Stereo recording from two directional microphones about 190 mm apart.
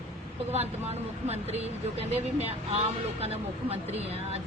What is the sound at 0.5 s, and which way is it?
Speech, 35° right (ahead or behind).